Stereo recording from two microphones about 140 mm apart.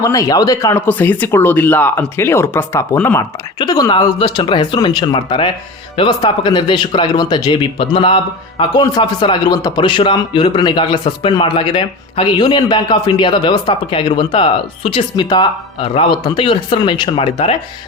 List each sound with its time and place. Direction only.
0.0 s speech: 25° left (ahead or behind); by 8.8 s 40° left (ahead or behind)
8.8 s speech: 30° left (ahead or behind)